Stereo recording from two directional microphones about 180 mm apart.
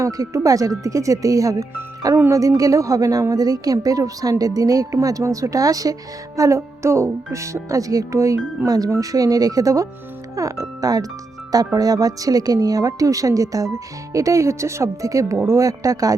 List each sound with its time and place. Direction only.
0.0 s speech: 20° right (ahead or behind)